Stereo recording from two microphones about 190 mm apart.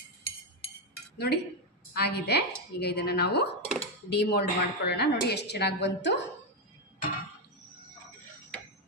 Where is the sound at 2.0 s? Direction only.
60° left (ahead or behind).